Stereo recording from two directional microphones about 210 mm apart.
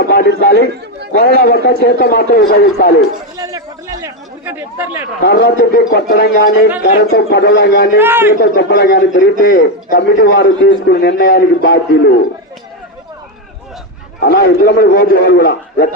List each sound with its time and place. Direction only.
0.0 s a man's voice: 45° left (ahead or behind)
3.3 s a sound: 15° right (ahead or behind)
4.0 s chatter: 10° right (ahead or behind)
5.2 s a man's voice: 50° left (ahead or behind)
7.9 s a man's voice: 10° right (ahead or behind)
8.4 s a man's voice: 50° left (ahead or behind)
14.2 s a man's voice: 50° left (ahead or behind)